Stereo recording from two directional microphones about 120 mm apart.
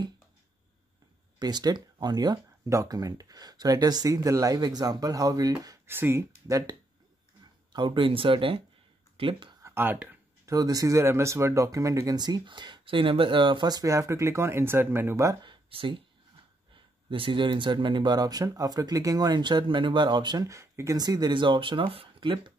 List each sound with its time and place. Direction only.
1.4 s speech: 35° right (ahead or behind)
5.9 s speech: 20° right (ahead or behind)
7.7 s speech: 45° right (ahead or behind)
9.1 s a sound: 50° right (ahead or behind)
9.6 s speech: 20° right (ahead or behind)
10.4 s speech: 30° right (ahead or behind)
15.4 s speech: 45° right (ahead or behind)